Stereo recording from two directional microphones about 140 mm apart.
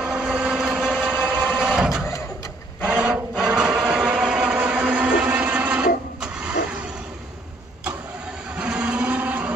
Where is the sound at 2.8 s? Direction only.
10° right (ahead or behind).